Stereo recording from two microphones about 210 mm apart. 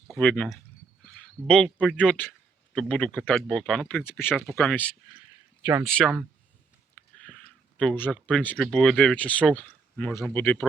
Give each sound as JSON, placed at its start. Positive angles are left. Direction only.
{"t": 0.1, "sound": "speech", "side_deg": 5}
{"t": 6.9, "sound": "a sound", "side_deg": 5}
{"t": 7.8, "sound": "speech", "side_deg": 5}